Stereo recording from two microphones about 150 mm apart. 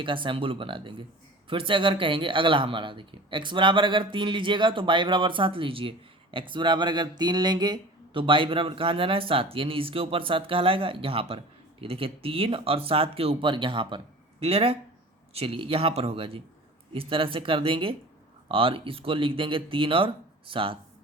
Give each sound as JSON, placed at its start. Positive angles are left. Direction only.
{"t": 0.0, "sound": "speech", "side_deg": -35}